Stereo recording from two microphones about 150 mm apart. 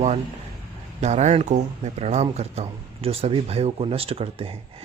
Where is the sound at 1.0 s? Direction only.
50° right (ahead or behind).